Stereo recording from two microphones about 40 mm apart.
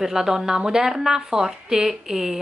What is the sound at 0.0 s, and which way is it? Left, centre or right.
Speech, centre.